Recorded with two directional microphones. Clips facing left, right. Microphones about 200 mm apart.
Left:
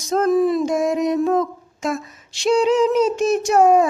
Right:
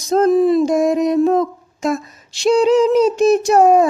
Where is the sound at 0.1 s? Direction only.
30° right (ahead or behind).